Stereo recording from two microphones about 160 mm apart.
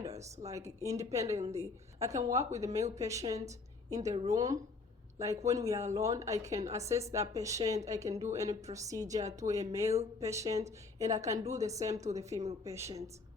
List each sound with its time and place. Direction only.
0.0 s speech: 20° right (ahead or behind)